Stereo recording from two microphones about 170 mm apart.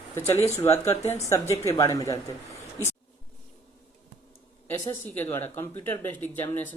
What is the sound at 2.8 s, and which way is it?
Speech, 20° right (ahead or behind).